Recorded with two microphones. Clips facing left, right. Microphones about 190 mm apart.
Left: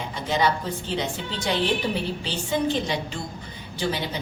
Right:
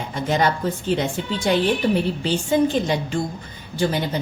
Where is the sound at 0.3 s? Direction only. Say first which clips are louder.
Right 3 dB; 50° right (ahead or behind).